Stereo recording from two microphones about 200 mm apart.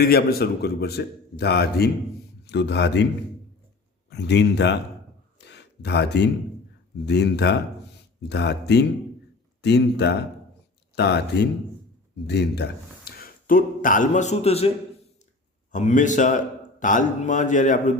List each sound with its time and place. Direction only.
0.0 s a man's voice: 50° left (ahead or behind)
4.1 s speech: 60° left (ahead or behind)
5.4 s a sound: 60° left (ahead or behind)
7.0 s a man's voice: 60° left (ahead or behind); by 14.7 s 30° left (ahead or behind)
15.7 s a man's voice: 35° left (ahead or behind)